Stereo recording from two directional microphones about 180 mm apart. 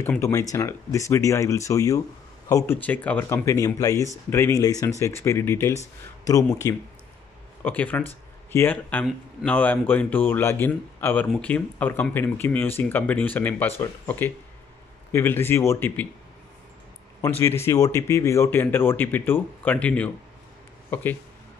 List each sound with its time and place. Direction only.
0.2 s speech: 15° left (ahead or behind)
17.2 s speech: 15° left (ahead or behind)